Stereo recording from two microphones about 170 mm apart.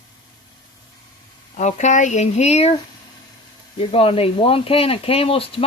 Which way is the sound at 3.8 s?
35° left (ahead or behind).